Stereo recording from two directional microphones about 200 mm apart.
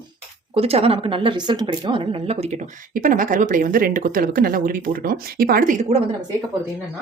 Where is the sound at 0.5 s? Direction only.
30° right (ahead or behind).